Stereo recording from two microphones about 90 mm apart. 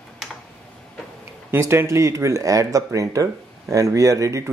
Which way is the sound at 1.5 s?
30° right (ahead or behind).